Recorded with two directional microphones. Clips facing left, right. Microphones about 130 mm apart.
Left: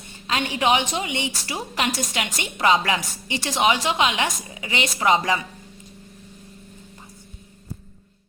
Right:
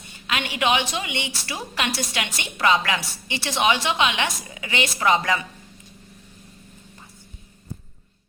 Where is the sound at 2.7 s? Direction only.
30° left (ahead or behind).